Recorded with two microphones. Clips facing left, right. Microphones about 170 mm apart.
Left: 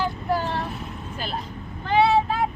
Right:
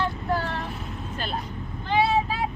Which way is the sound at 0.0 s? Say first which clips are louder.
Left 2 dB; 15° left (ahead or behind).